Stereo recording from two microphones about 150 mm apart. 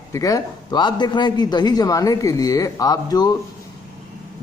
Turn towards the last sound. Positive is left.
turn(degrees=25)  # may be behind; listen again after turning